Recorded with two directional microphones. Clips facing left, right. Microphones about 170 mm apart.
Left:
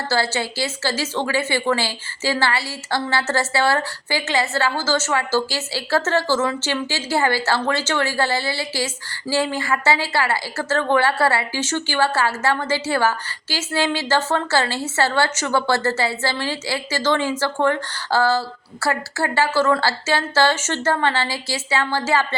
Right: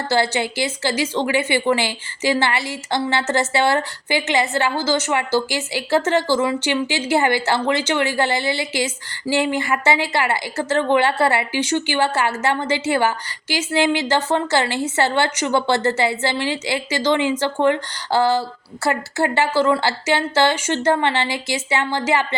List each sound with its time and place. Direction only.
0.1 s a woman's voice: 20° right (ahead or behind)